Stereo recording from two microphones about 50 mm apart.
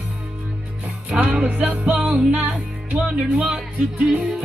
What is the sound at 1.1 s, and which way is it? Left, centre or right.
Music, right.